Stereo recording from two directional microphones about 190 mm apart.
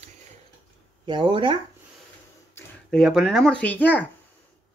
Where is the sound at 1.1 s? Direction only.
25° right (ahead or behind).